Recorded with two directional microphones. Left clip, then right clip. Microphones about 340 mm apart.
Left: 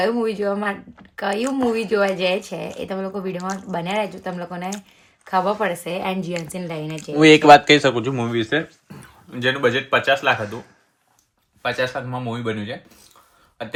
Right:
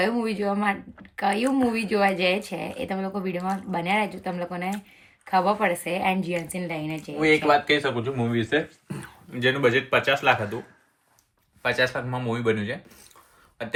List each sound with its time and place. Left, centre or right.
0.0 s speech: centre
7.2 s speech: left; by 12.7 s centre